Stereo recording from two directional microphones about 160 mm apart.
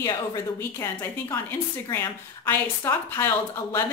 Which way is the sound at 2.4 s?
15° left (ahead or behind).